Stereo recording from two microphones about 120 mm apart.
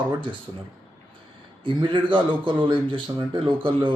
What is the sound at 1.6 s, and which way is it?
Speech, 45° right (ahead or behind).